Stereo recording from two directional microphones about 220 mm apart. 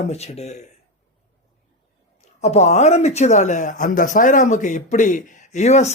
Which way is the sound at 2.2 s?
30° left (ahead or behind).